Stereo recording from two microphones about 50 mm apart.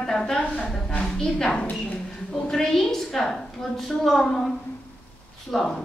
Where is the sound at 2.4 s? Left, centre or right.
Centre.